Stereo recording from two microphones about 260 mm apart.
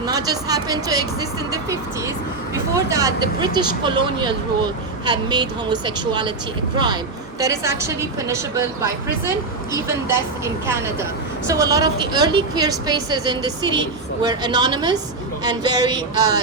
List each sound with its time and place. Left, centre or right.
0.0 s speech: centre
2.7 s speech: centre
9.7 s speech: centre